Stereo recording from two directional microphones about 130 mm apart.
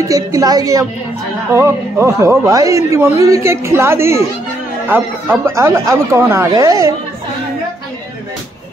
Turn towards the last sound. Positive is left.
turn(degrees=-25)  # may be behind; listen again after turning